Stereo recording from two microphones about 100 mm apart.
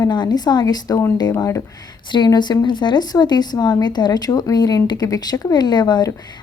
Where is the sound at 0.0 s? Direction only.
45° left (ahead or behind).